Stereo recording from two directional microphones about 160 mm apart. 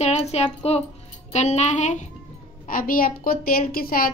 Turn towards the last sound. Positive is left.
turn(degrees=65)  # may be behind; listen again after turning